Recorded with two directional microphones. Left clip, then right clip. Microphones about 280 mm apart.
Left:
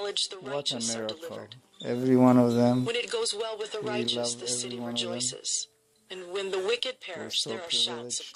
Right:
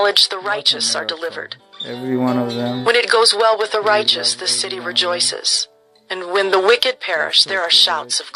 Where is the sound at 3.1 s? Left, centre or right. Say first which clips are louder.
Right 18 dB; right.